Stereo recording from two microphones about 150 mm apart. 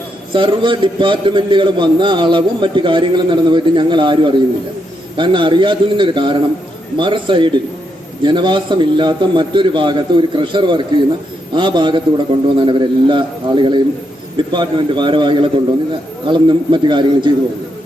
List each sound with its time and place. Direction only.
0.3 s a man's voice: 35° right (ahead or behind)